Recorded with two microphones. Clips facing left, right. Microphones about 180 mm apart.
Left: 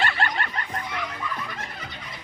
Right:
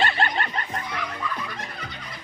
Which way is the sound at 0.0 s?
25° right (ahead or behind).